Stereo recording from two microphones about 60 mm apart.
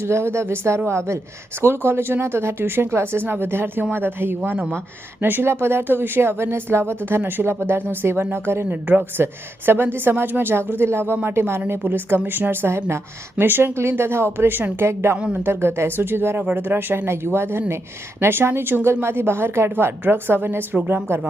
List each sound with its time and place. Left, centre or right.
0.0 s speech: right
8.9 s speech: right
13.4 s speech: right
16.4 s speech: right